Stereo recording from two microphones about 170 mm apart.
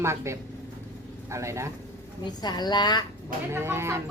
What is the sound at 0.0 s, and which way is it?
A woman's voice, 15° right (ahead or behind).